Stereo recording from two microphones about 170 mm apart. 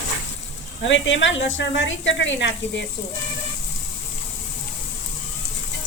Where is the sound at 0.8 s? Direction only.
90° left.